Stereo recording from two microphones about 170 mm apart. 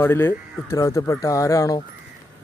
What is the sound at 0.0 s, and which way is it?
Speech, 15° left (ahead or behind).